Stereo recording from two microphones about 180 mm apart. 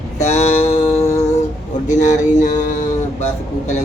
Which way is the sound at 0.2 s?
40° left (ahead or behind).